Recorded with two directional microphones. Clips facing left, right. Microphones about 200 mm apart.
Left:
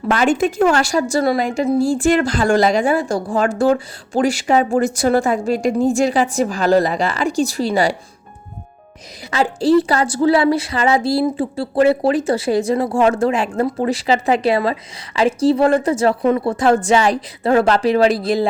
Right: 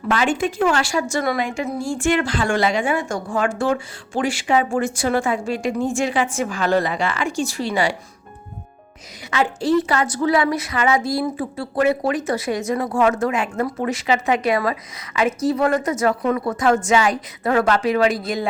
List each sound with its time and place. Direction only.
0.1 s a woman's voice: 40° left (ahead or behind)
9.3 s a woman's voice: 35° left (ahead or behind)